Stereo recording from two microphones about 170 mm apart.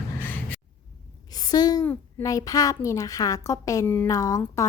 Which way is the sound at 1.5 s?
20° left (ahead or behind).